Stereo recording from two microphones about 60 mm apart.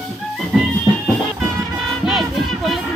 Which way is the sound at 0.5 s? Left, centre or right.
Centre.